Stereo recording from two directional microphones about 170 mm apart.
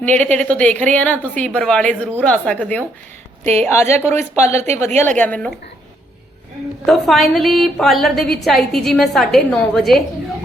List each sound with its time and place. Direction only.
0.0 s a woman's voice: 10° left (ahead or behind)
4.4 s a woman's voice: 40° right (ahead or behind)
5.1 s a woman's voice: 10° left (ahead or behind)
6.8 s a woman's voice: centre (ahead or behind)